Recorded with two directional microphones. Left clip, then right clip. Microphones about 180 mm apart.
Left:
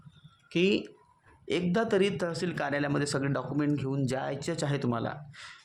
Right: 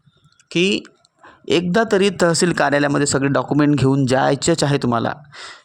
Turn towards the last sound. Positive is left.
turn(degrees=-40)  # may be behind; listen again after turning